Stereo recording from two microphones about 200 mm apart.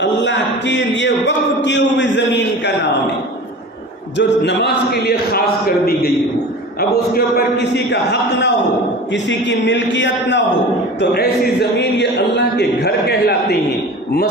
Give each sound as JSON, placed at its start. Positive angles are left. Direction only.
{"t": 0.0, "sound": "a sound", "side_deg": 60}
{"t": 4.2, "sound": "a man's voice", "side_deg": 60}
{"t": 7.1, "sound": "a man's voice", "side_deg": 50}
{"t": 7.9, "sound": "a man's voice", "side_deg": 60}
{"t": 11.8, "sound": "a man's voice", "side_deg": 60}